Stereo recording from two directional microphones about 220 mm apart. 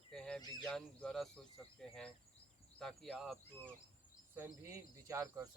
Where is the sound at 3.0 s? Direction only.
Centre (ahead or behind).